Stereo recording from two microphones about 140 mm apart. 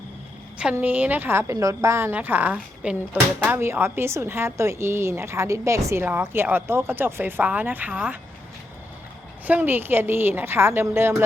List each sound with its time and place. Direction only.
0.6 s a woman's voice: 10° right (ahead or behind)
9.5 s a woman's voice: 15° right (ahead or behind)